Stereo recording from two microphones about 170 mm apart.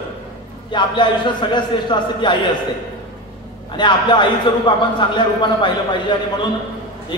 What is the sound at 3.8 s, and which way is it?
A man's voice, 25° left (ahead or behind).